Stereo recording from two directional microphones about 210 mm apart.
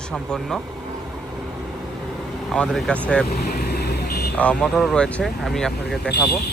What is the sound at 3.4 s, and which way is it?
Vehicle, 50° left (ahead or behind).